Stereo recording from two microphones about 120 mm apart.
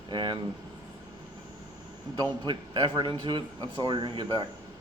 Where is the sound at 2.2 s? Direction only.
40° right (ahead or behind).